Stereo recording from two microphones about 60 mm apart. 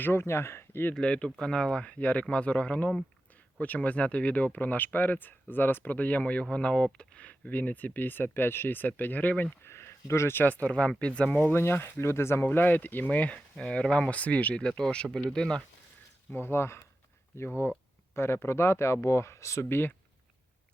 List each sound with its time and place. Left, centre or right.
0.0 s speech: left
0.9 s speech: centre
9.6 s speech: left
10.7 s speech: centre
11.5 s speech: left
12.5 s speech: left; by 15.6 s centre
16.3 s speech: left
19.6 s speech: left